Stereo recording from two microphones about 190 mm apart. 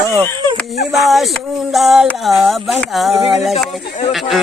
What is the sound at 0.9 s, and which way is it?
Speech, centre (ahead or behind).